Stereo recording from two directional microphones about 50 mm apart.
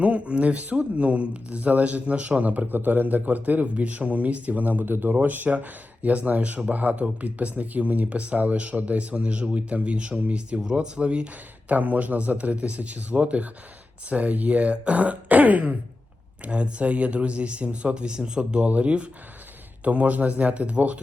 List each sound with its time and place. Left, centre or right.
0.0 s speech: right